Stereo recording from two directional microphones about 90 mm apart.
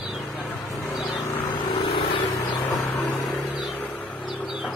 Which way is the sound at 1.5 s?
65° left (ahead or behind).